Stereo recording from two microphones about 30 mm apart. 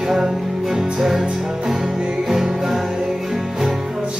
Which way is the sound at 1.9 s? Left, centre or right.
Right.